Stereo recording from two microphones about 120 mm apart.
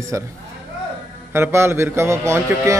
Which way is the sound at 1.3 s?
20° right (ahead or behind).